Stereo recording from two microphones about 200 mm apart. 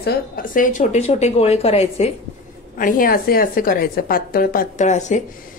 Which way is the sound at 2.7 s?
40° left (ahead or behind).